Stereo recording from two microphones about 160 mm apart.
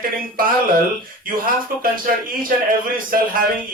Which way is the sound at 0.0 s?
65° right (ahead or behind).